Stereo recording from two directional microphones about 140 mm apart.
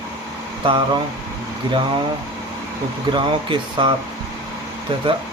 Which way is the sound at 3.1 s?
35° right (ahead or behind).